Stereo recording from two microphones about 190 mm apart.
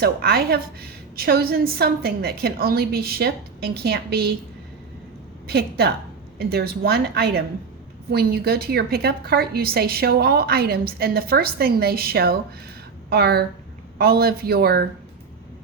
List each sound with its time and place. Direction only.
0.0 s a woman's voice: 55° right (ahead or behind)
5.5 s a woman's voice: 55° right (ahead or behind)